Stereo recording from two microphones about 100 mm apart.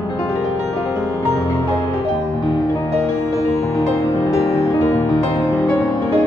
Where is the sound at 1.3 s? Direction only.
35° left (ahead or behind).